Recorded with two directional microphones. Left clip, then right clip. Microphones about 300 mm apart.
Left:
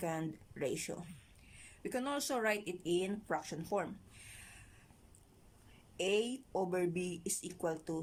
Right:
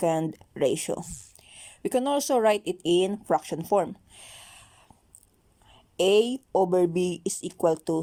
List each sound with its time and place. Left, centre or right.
0.0 s speech: right
4.3 s a sound: right
6.0 s speech: right